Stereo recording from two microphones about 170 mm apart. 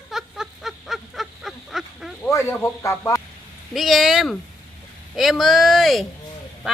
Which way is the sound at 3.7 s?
Centre (ahead or behind).